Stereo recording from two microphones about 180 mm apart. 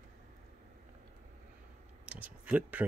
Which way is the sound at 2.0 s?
10° right (ahead or behind).